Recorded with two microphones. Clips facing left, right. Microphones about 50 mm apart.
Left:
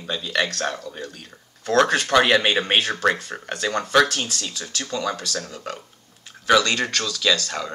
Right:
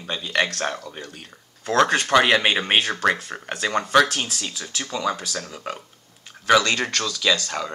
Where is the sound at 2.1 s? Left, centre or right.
Centre.